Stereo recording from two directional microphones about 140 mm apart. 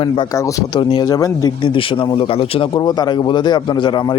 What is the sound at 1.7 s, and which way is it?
A man's voice, 40° left (ahead or behind).